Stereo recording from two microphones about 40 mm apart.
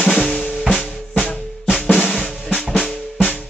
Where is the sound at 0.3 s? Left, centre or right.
Centre.